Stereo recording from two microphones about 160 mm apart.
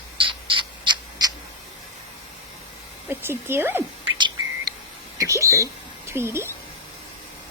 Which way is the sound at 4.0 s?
30° right (ahead or behind).